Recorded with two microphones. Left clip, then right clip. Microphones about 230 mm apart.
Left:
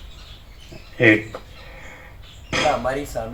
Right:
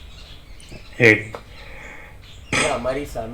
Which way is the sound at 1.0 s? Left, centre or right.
Right.